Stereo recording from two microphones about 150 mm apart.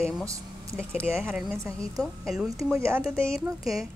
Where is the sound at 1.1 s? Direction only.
Centre (ahead or behind).